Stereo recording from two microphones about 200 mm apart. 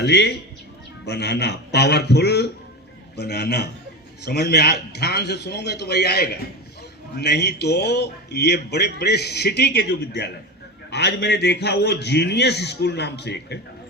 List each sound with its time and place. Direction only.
0.0 s a man's voice: 55° left (ahead or behind)